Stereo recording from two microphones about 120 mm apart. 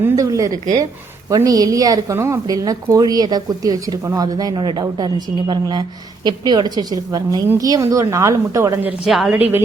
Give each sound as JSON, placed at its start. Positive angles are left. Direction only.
{"t": 0.2, "sound": "a sound", "side_deg": -30}
{"t": 1.5, "sound": "a woman's voice", "side_deg": -30}
{"t": 9.0, "sound": "a woman's voice", "side_deg": 0}
{"t": 9.4, "sound": "a woman's voice", "side_deg": -15}